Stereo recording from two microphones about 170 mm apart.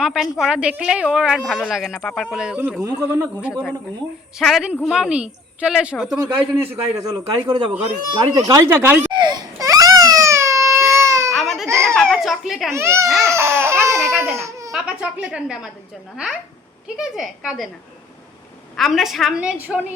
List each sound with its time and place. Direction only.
0.0 s a woman's voice: centre (ahead or behind)
3.5 s a woman's voice: 5° left (ahead or behind); by 9.0 s 15° right (ahead or behind)
9.1 s baby cry: 25° right (ahead or behind)
11.3 s baby cry: centre (ahead or behind)
11.7 s a sound: 15° right (ahead or behind)
11.9 s a sound: 5° left (ahead or behind)
12.7 s speech: 15° right (ahead or behind)
13.2 s laughter: 15° right (ahead or behind)
14.7 s a woman's voice: 5° right (ahead or behind)
18.8 s a woman's voice: centre (ahead or behind)